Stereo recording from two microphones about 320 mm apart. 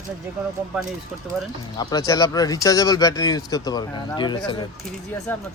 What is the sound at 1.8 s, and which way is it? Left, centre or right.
Speech, centre.